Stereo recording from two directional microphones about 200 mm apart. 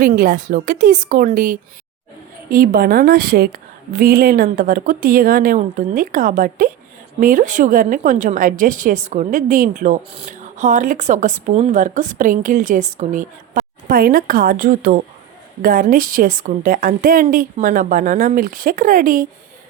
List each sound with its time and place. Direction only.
0.0 s a woman's voice: 45° right (ahead or behind)